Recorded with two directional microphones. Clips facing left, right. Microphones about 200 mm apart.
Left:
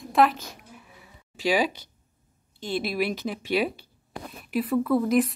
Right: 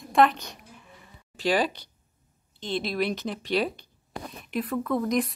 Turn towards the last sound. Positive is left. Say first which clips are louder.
# left 4 dB
turn(degrees=5)  # may be behind; listen again after turning